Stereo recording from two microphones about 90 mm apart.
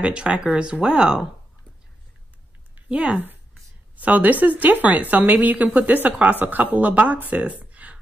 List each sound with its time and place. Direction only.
0.0 s a woman's voice: 10° right (ahead or behind)
2.7 s a woman's voice: 10° right (ahead or behind)